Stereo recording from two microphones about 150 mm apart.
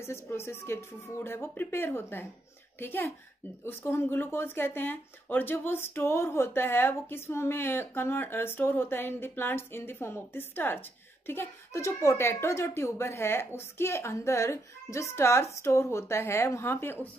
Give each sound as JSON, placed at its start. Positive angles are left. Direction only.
{"t": 0.0, "sound": "speech", "side_deg": 15}